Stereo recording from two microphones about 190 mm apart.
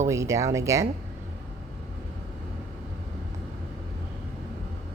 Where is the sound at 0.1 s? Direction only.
15° right (ahead or behind).